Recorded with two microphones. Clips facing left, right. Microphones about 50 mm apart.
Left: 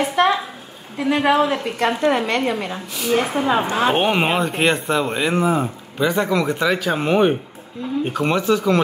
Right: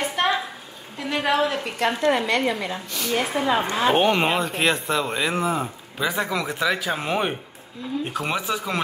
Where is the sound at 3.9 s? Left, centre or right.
Centre.